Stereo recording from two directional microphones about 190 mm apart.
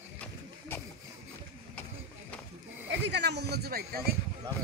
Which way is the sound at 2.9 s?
65° right (ahead or behind).